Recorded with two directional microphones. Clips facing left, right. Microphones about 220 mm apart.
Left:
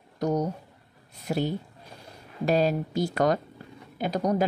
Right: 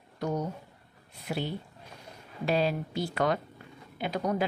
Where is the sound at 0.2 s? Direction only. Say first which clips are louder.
Left 5 dB; 40° left (ahead or behind).